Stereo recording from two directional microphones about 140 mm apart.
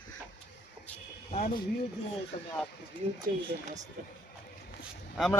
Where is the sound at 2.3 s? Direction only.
40° left (ahead or behind).